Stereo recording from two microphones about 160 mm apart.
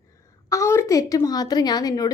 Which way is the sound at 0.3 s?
20° left (ahead or behind).